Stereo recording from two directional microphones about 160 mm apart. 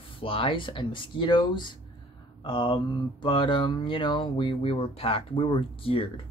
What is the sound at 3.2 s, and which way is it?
Speech, 30° left (ahead or behind).